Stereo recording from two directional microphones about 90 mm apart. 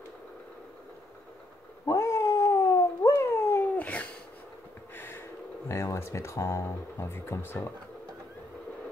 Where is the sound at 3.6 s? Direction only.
15° left (ahead or behind).